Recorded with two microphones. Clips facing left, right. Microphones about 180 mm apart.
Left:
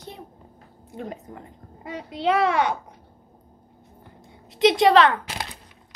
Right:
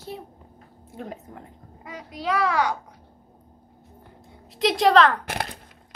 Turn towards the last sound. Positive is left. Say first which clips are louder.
# right 2 dB
turn(degrees=-55)  # may be behind; listen again after turning